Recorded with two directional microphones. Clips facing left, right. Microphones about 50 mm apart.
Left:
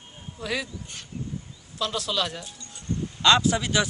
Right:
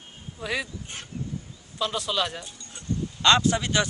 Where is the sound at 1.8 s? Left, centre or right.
Centre.